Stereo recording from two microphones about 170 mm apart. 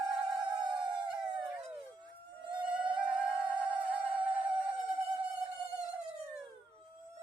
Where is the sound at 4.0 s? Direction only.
30° right (ahead or behind).